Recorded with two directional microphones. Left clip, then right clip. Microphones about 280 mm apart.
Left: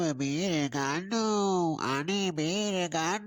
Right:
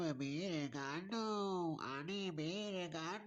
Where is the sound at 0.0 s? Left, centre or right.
Left.